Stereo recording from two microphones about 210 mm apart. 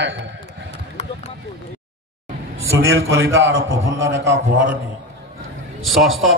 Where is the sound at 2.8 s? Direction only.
70° right (ahead or behind).